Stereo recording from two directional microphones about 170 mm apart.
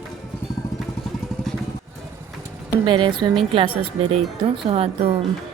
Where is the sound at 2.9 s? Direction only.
30° right (ahead or behind).